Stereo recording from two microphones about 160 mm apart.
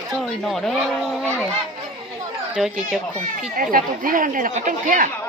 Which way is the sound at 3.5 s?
60° right (ahead or behind).